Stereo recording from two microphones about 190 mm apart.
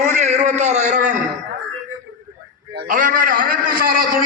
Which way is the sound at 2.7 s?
50° right (ahead or behind).